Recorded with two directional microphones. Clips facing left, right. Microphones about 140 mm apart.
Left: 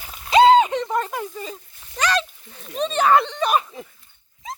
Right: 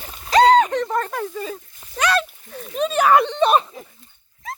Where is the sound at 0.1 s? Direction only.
5° left (ahead or behind).